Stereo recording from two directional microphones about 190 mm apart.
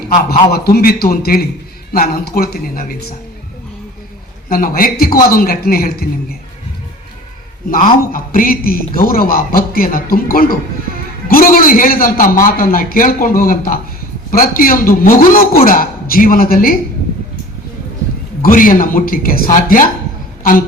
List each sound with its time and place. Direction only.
0.5 s a man's voice: 55° left (ahead or behind)
4.4 s a man's voice: 50° left (ahead or behind)
8.1 s a man's voice: 50° left (ahead or behind)
18.4 s a man's voice: 50° left (ahead or behind)